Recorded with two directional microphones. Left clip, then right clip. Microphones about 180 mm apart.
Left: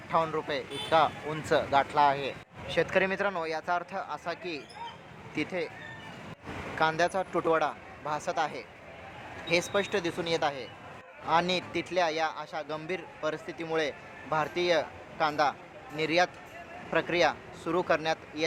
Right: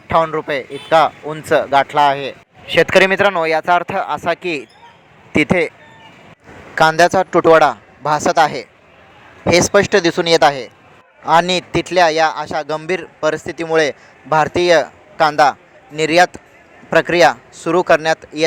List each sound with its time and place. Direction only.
0.3 s speech: 35° right (ahead or behind)
2.7 s a man's voice: 40° right (ahead or behind)
6.7 s a man's voice: 50° right (ahead or behind)